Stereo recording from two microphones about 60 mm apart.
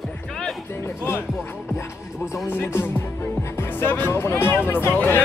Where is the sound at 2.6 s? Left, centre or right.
Left.